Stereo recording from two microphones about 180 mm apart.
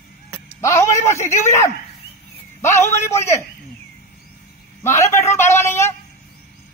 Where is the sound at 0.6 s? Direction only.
15° left (ahead or behind).